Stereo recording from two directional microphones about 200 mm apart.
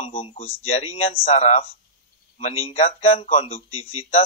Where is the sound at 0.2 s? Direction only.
30° left (ahead or behind).